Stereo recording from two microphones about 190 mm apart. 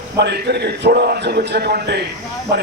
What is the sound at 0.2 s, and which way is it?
A man's voice, 60° right (ahead or behind).